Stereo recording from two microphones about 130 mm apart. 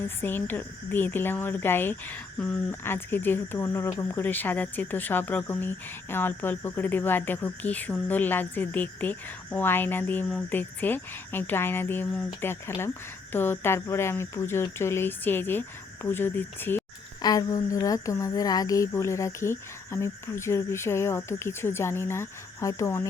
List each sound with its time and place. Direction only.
0.0 s speech: 15° left (ahead or behind)
17.2 s speech: 30° left (ahead or behind)